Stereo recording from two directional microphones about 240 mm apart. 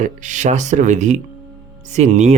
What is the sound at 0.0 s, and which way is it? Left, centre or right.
Speech, right.